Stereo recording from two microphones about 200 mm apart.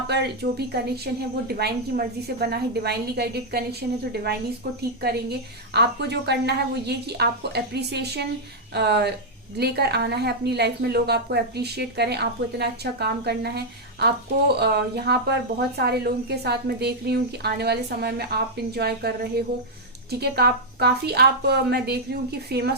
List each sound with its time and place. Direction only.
0.1 s a woman's voice: 55° right (ahead or behind)